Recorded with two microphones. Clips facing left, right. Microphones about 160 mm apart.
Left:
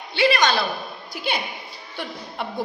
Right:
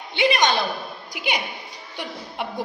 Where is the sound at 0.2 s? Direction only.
20° right (ahead or behind).